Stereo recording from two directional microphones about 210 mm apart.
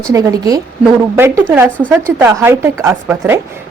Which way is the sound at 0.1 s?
15° right (ahead or behind).